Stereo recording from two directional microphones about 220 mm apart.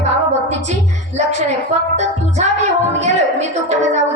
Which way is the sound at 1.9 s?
30° right (ahead or behind).